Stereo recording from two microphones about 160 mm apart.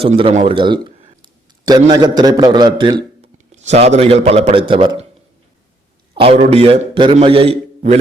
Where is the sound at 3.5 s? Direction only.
45° right (ahead or behind).